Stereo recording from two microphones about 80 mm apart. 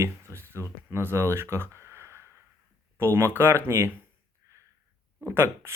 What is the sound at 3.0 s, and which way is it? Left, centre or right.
Speech, right.